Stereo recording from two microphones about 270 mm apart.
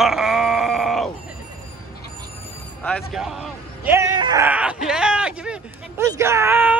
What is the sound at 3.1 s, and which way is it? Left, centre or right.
A man's voice, centre.